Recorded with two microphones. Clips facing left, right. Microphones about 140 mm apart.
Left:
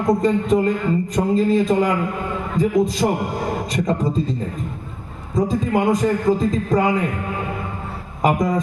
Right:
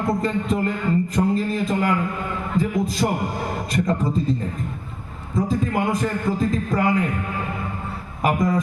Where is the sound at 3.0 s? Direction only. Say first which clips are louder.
Left 3 dB; 20° left (ahead or behind).